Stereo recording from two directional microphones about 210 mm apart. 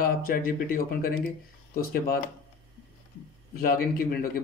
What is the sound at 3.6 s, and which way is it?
Speech, 45° left (ahead or behind).